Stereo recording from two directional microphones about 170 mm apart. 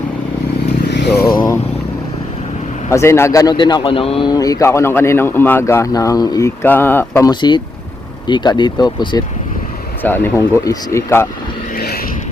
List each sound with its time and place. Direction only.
0.9 s vehicle: 80° left; by 1.4 s 65° left (ahead or behind)
2.9 s a man's voice: 15° left (ahead or behind); by 4.3 s 30° left (ahead or behind)
4.3 s a man's voice: 20° left (ahead or behind)
10.0 s speech: 10° left (ahead or behind)